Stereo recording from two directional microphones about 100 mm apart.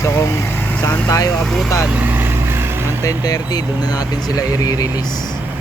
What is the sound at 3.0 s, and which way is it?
Speech, 35° left (ahead or behind).